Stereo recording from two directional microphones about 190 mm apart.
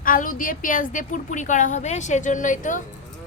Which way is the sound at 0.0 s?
45° left (ahead or behind).